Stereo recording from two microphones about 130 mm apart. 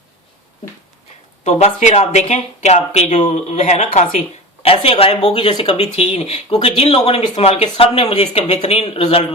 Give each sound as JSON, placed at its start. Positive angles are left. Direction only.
{"t": 1.5, "sound": "speech", "side_deg": 65}
{"t": 4.6, "sound": "speech", "side_deg": 45}